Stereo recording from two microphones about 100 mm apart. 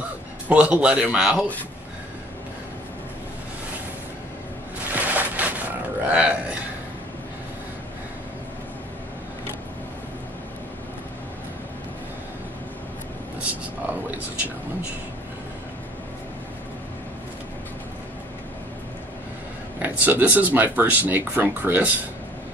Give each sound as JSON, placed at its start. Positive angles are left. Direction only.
{"t": 0.5, "sound": "speech", "side_deg": -10}
{"t": 4.9, "sound": "a sound", "side_deg": -15}
{"t": 6.0, "sound": "speech", "side_deg": -15}
{"t": 19.8, "sound": "speech", "side_deg": -15}